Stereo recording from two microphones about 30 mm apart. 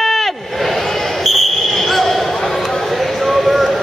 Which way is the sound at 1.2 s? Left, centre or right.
Centre.